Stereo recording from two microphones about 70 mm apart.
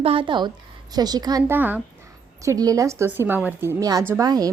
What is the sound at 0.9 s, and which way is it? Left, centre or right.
Speech, right.